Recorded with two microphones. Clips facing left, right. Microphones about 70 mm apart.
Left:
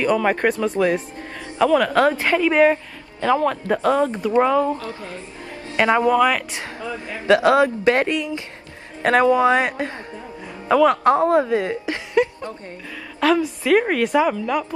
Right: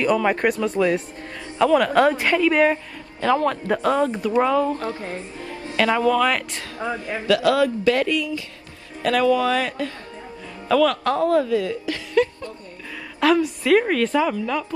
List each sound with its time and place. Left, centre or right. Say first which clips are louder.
0.1 s a woman's voice: left 1 dB; centre
4.8 s music: right 3 dB; right
5.8 s speech: left 2 dB; left
6.8 s music: right 5 dB; right
7.2 s a woman's voice: left 3 dB; left
13.2 s a woman's voice: even; centre
13.7 s speech: left 2 dB; centre